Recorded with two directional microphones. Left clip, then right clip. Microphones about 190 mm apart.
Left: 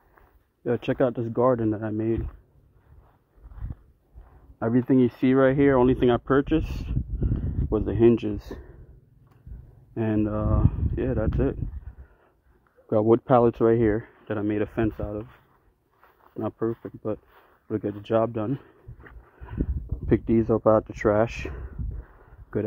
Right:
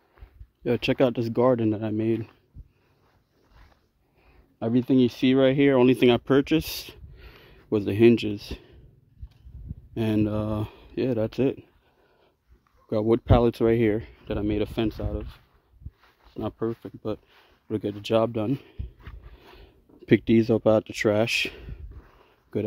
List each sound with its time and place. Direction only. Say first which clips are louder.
0.7 s speech: right 1 dB; 45° right (ahead or behind)
4.6 s speech: left 1 dB; 25° right (ahead or behind)
9.9 s speech: even; 30° right (ahead or behind)
12.9 s speech: left 3 dB; 10° right (ahead or behind)
13.7 s speech: left 1 dB; 30° right (ahead or behind)
14.9 s speech: left 1 dB; 10° right (ahead or behind)
16.3 s speech: left 1 dB; 15° right (ahead or behind); by 18.8 s 35° right (ahead or behind)
20.1 s speech: right 2 dB; 40° right (ahead or behind)